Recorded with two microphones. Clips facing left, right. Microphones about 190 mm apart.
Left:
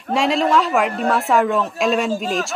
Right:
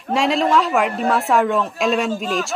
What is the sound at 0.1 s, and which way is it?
A woman's voice, centre (ahead or behind).